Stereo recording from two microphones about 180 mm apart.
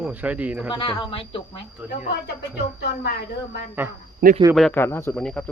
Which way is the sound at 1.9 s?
60° left (ahead or behind).